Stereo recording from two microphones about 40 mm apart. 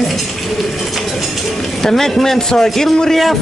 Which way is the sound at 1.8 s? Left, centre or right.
Centre.